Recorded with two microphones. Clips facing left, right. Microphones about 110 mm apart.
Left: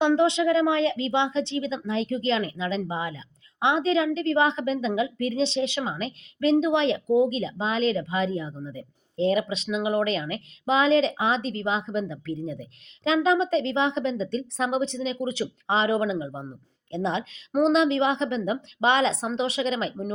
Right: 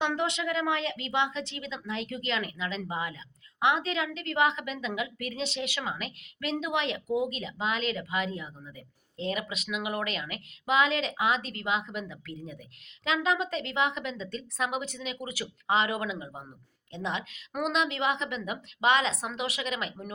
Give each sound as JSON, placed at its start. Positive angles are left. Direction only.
{"t": 0.0, "sound": "a woman's voice", "side_deg": 25}